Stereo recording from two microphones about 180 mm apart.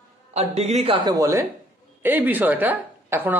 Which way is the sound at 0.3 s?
35° right (ahead or behind).